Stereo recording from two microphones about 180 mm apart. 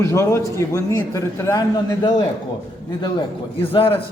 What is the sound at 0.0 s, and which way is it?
A man's voice, 15° left (ahead or behind).